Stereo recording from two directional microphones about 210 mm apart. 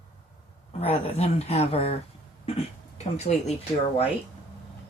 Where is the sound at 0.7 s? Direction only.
30° left (ahead or behind).